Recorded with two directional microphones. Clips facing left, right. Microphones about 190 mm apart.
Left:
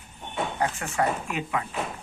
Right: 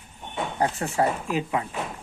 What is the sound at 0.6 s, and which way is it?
Speech, 35° right (ahead or behind).